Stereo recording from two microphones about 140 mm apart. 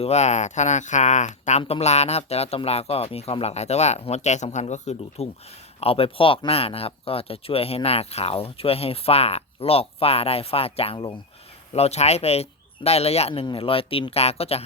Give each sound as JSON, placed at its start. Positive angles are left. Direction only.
{"t": 0.0, "sound": "speech", "side_deg": 50}
{"t": 11.7, "sound": "speech", "side_deg": 50}